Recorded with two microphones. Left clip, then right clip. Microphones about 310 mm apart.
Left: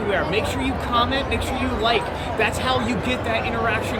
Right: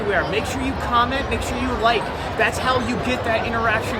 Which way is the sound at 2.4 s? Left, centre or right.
Centre.